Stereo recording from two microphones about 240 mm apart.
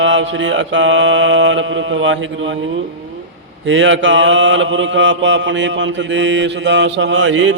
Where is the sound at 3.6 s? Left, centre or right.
Right.